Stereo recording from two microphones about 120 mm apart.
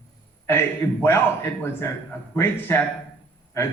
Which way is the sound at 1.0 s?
20° left (ahead or behind).